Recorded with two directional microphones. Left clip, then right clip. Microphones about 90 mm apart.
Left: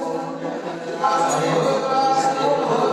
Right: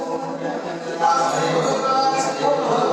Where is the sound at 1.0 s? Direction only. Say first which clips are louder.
Right 1 dB; 35° right (ahead or behind).